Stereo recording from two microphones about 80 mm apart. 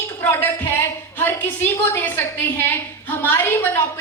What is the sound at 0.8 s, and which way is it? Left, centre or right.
A woman's voice, left.